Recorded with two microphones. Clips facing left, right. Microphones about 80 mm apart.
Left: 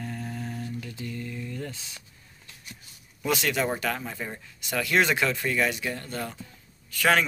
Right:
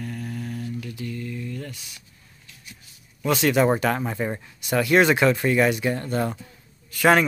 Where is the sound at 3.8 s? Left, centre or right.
Right.